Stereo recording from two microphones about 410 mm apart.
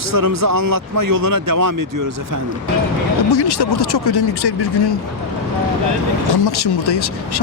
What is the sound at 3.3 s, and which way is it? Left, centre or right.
Speech, left.